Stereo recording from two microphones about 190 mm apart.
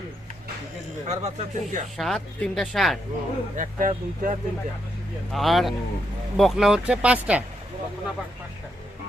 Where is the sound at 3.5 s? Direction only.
45° right (ahead or behind).